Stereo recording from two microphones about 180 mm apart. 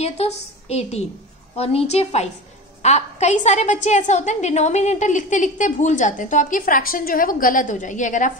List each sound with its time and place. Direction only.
0.0 s a woman's voice: 35° left (ahead or behind)